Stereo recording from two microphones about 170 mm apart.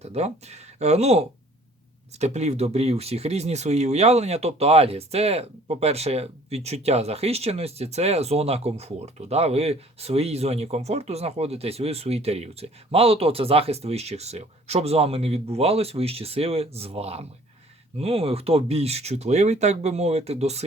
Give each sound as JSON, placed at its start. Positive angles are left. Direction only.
{"t": 0.0, "sound": "speech", "side_deg": -40}